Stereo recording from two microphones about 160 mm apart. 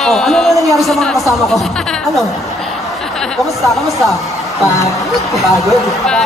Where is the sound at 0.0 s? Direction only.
Centre (ahead or behind).